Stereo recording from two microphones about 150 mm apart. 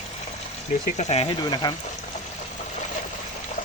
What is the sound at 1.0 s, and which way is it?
Speech, 45° left (ahead or behind).